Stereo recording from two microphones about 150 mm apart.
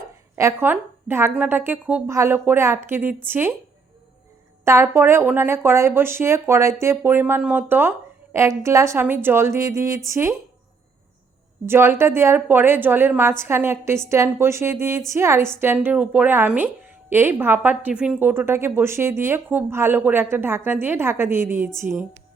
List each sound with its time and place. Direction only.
0.3 s a woman's voice: 15° right (ahead or behind)
4.6 s a woman's voice: 20° right (ahead or behind)
11.6 s a woman's voice: 15° right (ahead or behind)